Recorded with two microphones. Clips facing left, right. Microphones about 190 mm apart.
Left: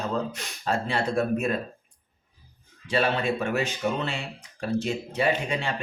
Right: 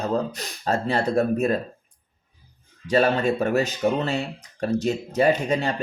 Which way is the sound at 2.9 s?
40° right (ahead or behind).